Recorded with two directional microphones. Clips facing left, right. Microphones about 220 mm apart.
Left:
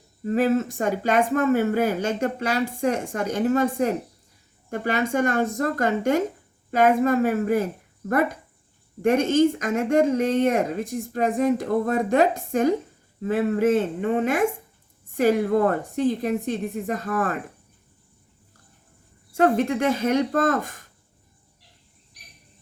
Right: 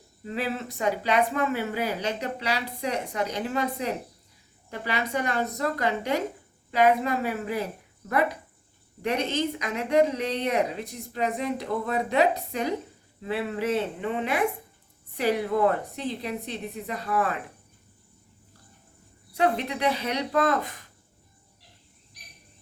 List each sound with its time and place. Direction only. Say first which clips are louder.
0.3 s speech: left 10 dB; 45° left (ahead or behind)
19.3 s speech: left 6 dB; 45° left (ahead or behind)